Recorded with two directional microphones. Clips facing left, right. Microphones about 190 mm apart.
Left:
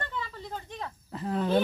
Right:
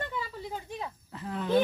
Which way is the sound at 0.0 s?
10° right (ahead or behind).